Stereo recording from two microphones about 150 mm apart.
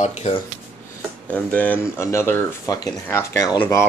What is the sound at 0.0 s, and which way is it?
Speech, 45° left (ahead or behind).